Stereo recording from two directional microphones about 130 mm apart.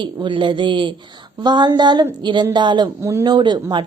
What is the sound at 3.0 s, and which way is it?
Speech, 20° right (ahead or behind).